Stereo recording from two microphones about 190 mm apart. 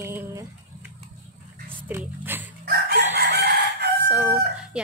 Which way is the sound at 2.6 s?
55° right (ahead or behind).